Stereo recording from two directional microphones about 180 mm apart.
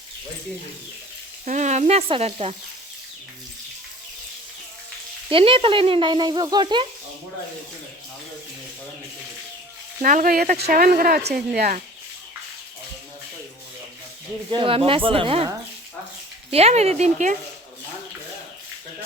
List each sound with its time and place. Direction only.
1.5 s sizzle: 40° right (ahead or behind)
5.3 s speech: 30° right (ahead or behind)
10.0 s speech: 50° right (ahead or behind)
14.5 s speech: 30° right (ahead or behind)
16.5 s sizzle: 35° right (ahead or behind)